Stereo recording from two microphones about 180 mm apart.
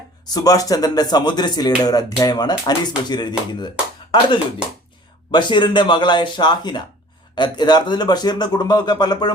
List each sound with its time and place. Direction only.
0.3 s speech: 20° left (ahead or behind)
5.3 s speech: 25° left (ahead or behind)